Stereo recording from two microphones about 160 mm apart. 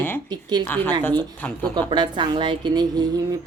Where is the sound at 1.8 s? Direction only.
30° right (ahead or behind).